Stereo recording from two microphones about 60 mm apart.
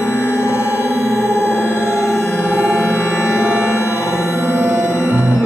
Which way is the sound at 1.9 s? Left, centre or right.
Centre.